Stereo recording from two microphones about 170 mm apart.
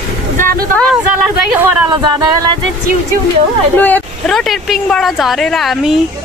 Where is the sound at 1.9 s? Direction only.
25° right (ahead or behind).